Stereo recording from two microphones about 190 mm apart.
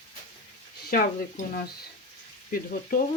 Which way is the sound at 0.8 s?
50° left (ahead or behind).